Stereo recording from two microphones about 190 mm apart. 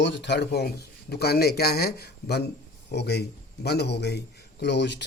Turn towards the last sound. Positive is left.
turn(degrees=65)  # may be behind; listen again after turning